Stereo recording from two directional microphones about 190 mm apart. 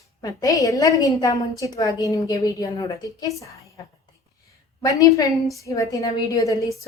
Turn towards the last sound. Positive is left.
turn(degrees=20)  # may be behind; listen again after turning